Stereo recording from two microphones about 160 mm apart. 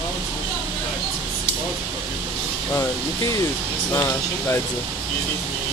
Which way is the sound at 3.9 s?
15° left (ahead or behind).